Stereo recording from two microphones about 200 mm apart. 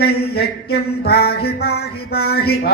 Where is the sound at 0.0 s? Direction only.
50° left (ahead or behind).